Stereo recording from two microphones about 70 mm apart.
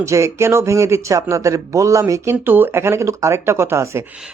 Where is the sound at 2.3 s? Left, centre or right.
Right.